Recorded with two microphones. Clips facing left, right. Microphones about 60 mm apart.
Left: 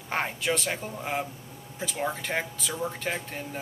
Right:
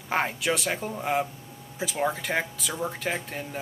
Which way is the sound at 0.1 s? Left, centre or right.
Centre.